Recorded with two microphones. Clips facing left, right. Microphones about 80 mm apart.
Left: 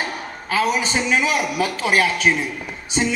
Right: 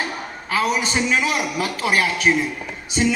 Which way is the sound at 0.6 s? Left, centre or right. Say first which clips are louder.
Left 1 dB; left.